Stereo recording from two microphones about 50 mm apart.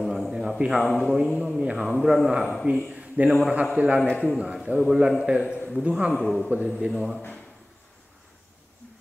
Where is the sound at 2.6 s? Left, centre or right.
Right.